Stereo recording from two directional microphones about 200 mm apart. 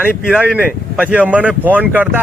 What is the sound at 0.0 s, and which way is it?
Speech, 5° right (ahead or behind).